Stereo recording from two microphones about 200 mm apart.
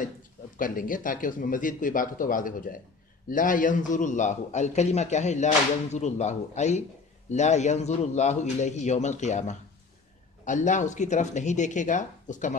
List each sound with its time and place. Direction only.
0.6 s a man's voice: 45° left (ahead or behind)